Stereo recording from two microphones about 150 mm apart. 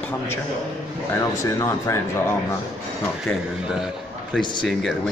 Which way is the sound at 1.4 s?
20° left (ahead or behind).